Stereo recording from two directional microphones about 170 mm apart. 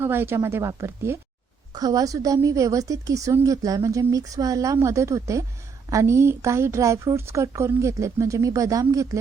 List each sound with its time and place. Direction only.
0.0 s a woman's voice: 15° right (ahead or behind)